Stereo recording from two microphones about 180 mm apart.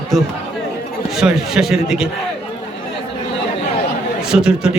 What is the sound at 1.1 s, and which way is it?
Speech, centre (ahead or behind).